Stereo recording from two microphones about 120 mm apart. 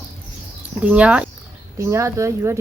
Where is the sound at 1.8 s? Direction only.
25° right (ahead or behind).